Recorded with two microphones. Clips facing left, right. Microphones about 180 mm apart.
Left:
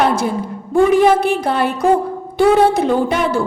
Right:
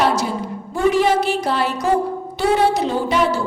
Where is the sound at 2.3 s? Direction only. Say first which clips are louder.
Left 5 dB; 55° left (ahead or behind).